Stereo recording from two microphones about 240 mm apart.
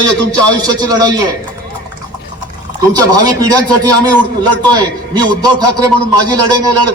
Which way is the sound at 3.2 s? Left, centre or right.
Centre.